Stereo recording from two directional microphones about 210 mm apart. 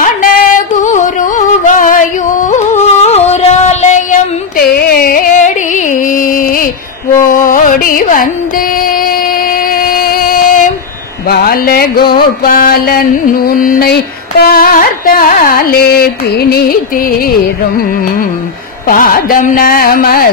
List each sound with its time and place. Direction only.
0.0 s music: 40° left (ahead or behind)
9.8 s a sound: 45° left (ahead or behind)
11.2 s carnatic music: 45° left (ahead or behind)
18.9 s carnatic music: 40° left (ahead or behind)